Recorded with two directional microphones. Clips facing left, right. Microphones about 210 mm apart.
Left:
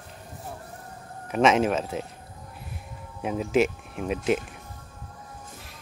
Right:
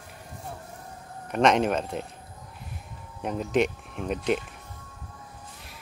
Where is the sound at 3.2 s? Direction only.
5° left (ahead or behind).